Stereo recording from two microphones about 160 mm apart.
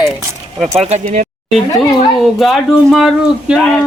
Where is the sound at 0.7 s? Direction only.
40° right (ahead or behind).